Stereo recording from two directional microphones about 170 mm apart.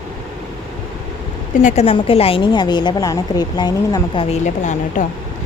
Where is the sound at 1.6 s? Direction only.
40° left (ahead or behind).